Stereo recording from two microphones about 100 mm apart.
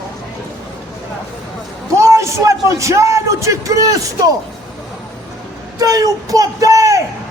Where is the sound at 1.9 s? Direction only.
30° right (ahead or behind).